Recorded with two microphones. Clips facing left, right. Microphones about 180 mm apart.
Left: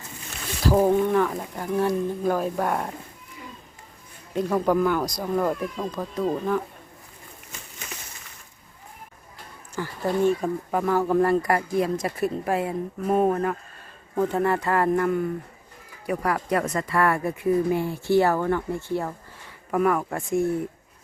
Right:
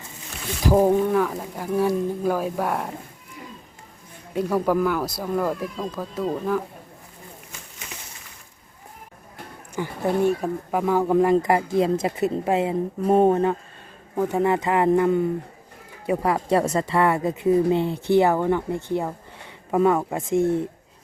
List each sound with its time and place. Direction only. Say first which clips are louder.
0.6 s speech: right 2 dB; 15° right (ahead or behind)
4.4 s speech: even; 5° right (ahead or behind)
9.7 s speech: right 2 dB; 20° right (ahead or behind)
10.4 s speech: right 1 dB; 5° right (ahead or behind); by 13.6 s 25° right (ahead or behind)
14.2 s speech: right 2 dB; 10° right (ahead or behind)